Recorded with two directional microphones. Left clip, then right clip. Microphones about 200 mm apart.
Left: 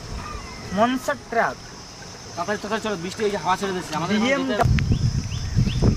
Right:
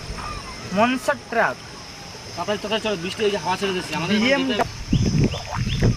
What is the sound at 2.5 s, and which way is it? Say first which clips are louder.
Speech: right 3 dB; centre (ahead or behind).